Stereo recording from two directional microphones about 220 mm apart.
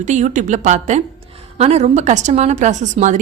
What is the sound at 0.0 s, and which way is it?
A woman's voice, 35° right (ahead or behind).